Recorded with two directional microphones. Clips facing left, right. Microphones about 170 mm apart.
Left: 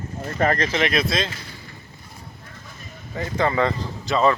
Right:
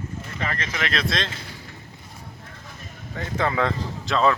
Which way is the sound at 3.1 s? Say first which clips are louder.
Left 3 dB; centre (ahead or behind).